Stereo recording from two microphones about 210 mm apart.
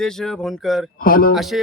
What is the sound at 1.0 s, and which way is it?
Speech, 40° left (ahead or behind).